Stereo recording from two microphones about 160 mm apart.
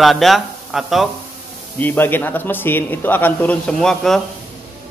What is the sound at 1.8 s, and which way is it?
Speech, 10° left (ahead or behind).